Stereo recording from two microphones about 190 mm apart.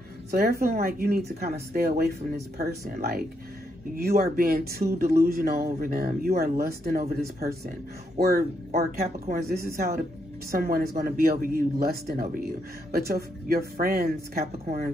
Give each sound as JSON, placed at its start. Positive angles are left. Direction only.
{"t": 0.3, "sound": "speech", "side_deg": -55}